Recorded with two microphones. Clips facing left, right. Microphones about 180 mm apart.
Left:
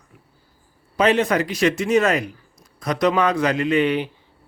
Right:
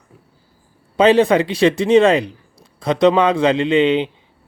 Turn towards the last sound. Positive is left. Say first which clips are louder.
# right 4 dB
turn(degrees=-25)  # may be behind; listen again after turning